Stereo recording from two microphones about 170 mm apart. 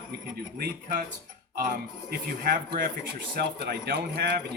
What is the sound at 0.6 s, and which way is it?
A man's voice, 60° right (ahead or behind).